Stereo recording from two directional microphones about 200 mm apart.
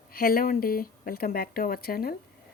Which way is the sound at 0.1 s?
50° left (ahead or behind).